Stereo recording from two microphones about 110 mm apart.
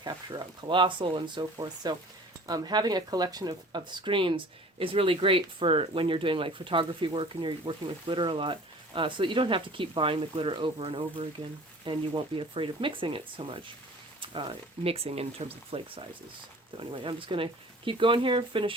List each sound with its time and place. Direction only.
0.0 s speech: 40° right (ahead or behind)